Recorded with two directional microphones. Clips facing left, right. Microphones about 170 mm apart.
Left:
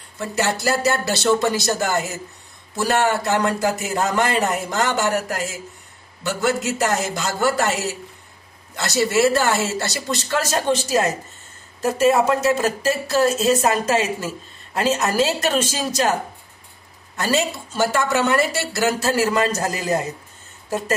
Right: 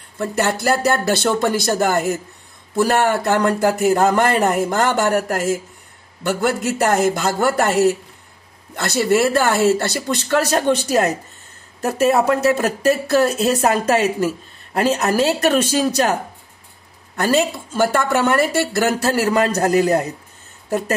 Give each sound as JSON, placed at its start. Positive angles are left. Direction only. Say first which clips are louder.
{"t": 0.2, "sound": "a man's voice", "louder": "right 3 dB", "side_deg": -55}
{"t": 17.2, "sound": "speech", "louder": "right 4 dB", "side_deg": -55}